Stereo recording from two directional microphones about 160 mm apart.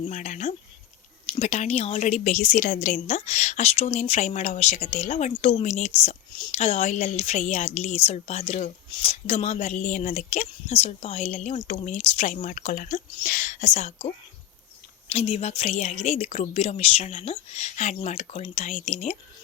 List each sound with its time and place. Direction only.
0.0 s speech: 50° left (ahead or behind)
15.1 s speech: 40° left (ahead or behind)